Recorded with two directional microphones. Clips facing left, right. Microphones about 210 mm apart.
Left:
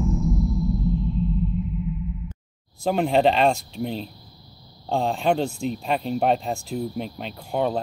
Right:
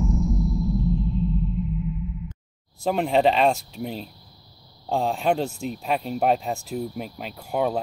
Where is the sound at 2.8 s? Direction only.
Centre (ahead or behind).